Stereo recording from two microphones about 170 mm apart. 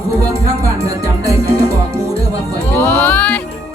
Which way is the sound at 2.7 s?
10° left (ahead or behind).